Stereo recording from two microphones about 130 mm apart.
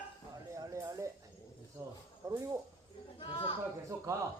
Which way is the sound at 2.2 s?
25° right (ahead or behind).